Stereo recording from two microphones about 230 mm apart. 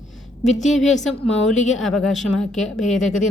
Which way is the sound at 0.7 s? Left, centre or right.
Centre.